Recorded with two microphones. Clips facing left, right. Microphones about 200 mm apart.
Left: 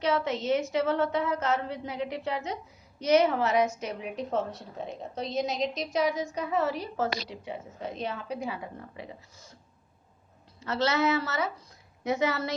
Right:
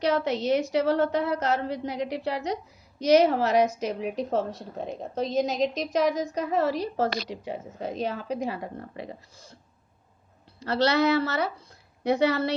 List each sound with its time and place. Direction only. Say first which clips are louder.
0.0 s a woman's voice: right 3 dB; 35° right (ahead or behind)
10.6 s a woman's voice: right 4 dB; 35° right (ahead or behind)